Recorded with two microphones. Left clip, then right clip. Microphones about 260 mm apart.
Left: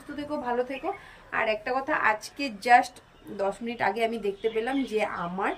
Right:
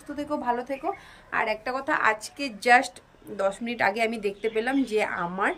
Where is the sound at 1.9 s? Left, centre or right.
Centre.